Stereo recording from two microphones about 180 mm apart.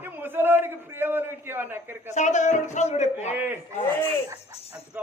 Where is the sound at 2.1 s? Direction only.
40° left (ahead or behind).